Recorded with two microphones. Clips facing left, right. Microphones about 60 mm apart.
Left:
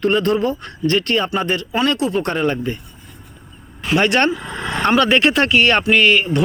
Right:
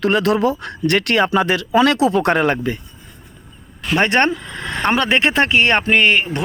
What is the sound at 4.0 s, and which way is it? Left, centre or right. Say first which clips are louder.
Speech: even; right.